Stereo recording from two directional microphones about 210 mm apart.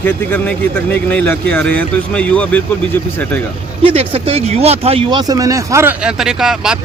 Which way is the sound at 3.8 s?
25° right (ahead or behind).